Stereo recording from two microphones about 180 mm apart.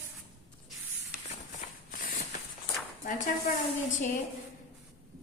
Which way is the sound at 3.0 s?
45° left (ahead or behind).